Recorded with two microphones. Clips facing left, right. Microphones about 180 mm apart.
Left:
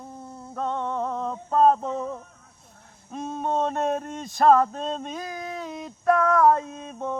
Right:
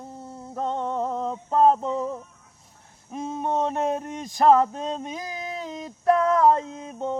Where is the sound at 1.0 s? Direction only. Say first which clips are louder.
Right 1 dB; 30° right (ahead or behind).